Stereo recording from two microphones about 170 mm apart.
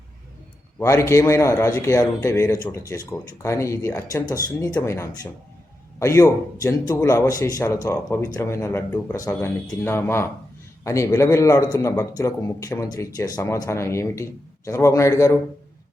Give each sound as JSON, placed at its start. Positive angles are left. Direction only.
{"t": 0.8, "sound": "a man's voice", "side_deg": 15}